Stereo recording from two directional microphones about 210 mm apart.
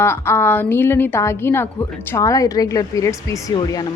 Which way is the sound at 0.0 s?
10° left (ahead or behind).